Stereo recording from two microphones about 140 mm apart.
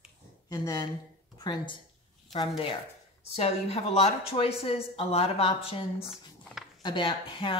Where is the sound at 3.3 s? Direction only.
45° left (ahead or behind).